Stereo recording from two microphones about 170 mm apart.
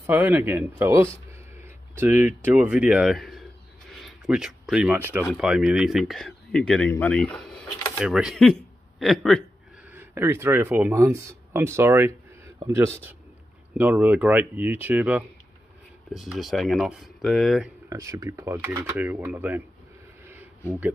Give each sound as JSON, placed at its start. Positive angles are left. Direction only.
{"t": 0.0, "sound": "speech", "side_deg": -10}
{"t": 9.8, "sound": "speech", "side_deg": -10}
{"t": 17.8, "sound": "speech", "side_deg": -15}